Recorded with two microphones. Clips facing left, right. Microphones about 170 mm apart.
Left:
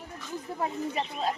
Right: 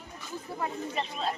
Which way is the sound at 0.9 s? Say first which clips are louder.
Left 2 dB; 15° left (ahead or behind).